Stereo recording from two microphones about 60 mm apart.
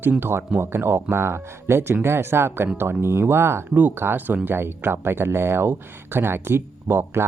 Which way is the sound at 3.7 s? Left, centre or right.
Right.